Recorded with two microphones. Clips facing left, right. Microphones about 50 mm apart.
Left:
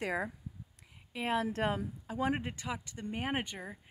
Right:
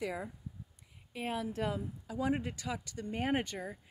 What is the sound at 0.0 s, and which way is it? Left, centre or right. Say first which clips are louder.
Speech: left 3 dB; left.